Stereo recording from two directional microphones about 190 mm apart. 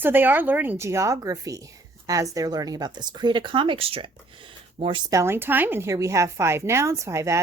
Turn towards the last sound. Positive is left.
turn(degrees=-15)  # may be behind; listen again after turning